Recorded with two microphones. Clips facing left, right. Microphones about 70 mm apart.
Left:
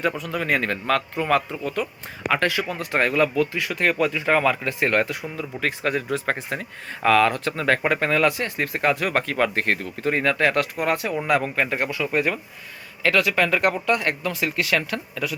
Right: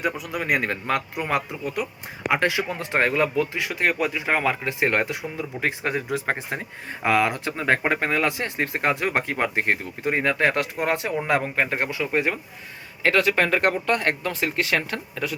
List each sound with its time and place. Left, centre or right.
0.0 s a man's voice: centre
13.0 s speech: right